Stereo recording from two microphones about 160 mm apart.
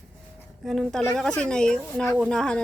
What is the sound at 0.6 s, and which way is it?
A woman's voice, centre (ahead or behind).